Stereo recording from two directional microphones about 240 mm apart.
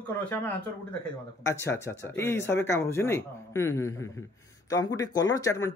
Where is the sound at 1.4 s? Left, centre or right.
Centre.